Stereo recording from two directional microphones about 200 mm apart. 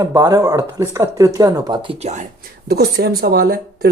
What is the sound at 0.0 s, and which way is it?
Speech, 20° right (ahead or behind).